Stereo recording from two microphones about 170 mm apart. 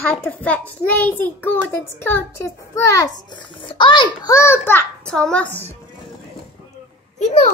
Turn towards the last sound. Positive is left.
turn(degrees=40)  # may be behind; listen again after turning